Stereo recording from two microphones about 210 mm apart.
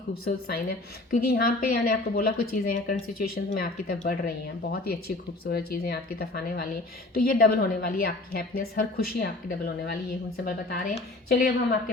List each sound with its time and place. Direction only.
0.3 s a woman's voice: 50° left (ahead or behind)